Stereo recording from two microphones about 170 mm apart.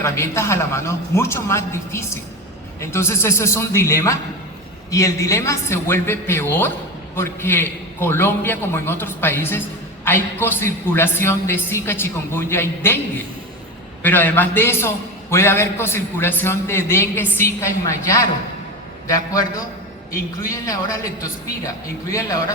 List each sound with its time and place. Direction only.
0.0 s a man's voice: 15° left (ahead or behind)
14.0 s a man's voice: 10° left (ahead or behind)
20.5 s a man's voice: 20° left (ahead or behind)